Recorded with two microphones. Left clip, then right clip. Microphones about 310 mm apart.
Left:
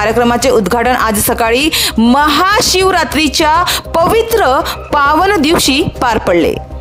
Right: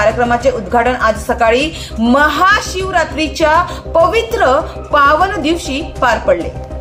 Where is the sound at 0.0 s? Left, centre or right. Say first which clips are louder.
Left 1 dB; left.